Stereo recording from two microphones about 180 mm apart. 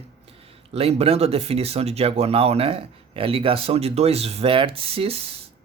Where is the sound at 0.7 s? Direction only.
35° right (ahead or behind).